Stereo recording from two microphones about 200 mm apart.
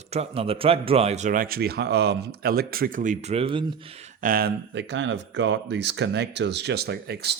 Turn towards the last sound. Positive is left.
turn(degrees=-55)  # may be behind; listen again after turning